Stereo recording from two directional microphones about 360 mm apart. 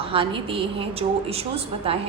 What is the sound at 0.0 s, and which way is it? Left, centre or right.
A woman's voice, centre.